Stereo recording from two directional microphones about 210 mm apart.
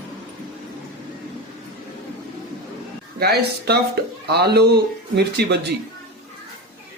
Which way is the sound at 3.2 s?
50° right (ahead or behind).